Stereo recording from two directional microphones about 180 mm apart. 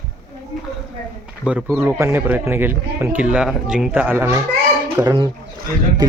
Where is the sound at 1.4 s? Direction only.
5° right (ahead or behind); by 5.2 s 20° right (ahead or behind).